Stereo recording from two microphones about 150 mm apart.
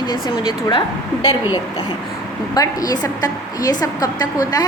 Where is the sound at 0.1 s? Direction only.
30° left (ahead or behind).